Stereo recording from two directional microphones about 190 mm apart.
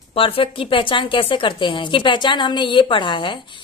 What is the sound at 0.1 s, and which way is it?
A woman's voice, 30° left (ahead or behind).